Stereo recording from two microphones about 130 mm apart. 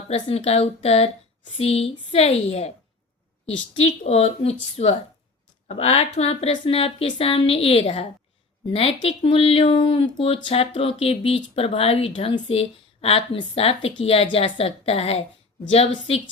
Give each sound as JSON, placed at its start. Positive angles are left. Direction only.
{"t": 0.1, "sound": "speech", "side_deg": 50}
{"t": 3.8, "sound": "a woman's voice", "side_deg": 50}